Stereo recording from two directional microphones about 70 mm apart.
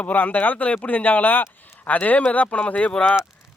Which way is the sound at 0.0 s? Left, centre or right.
Left.